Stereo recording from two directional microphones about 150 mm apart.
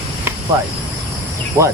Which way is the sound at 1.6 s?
20° right (ahead or behind).